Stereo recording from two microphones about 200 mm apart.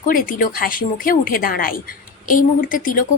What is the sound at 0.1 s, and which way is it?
Speech, 45° left (ahead or behind).